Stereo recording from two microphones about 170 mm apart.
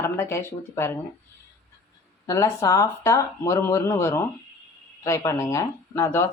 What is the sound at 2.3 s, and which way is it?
A woman's voice, 20° left (ahead or behind).